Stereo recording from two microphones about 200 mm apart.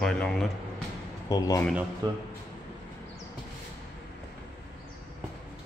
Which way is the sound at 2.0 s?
20° right (ahead or behind).